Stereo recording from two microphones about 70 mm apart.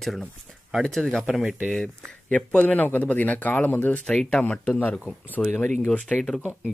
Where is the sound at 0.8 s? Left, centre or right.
Centre.